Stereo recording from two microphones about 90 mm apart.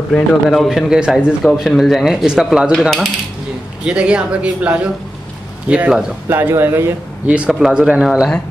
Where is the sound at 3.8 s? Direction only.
10° right (ahead or behind).